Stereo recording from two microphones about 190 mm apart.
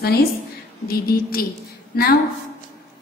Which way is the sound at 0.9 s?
55° left (ahead or behind).